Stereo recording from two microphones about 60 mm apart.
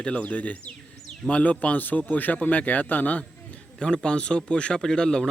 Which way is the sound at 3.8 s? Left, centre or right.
Centre.